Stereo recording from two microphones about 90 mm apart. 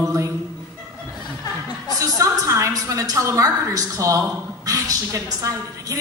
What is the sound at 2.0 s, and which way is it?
A woman's voice, 40° right (ahead or behind).